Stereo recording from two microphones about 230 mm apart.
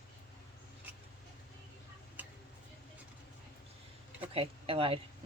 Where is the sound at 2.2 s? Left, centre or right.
Centre.